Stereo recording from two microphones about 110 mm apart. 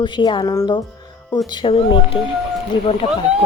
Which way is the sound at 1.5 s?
55° left (ahead or behind).